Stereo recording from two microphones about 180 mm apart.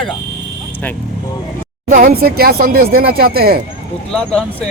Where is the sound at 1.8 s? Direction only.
50° right (ahead or behind).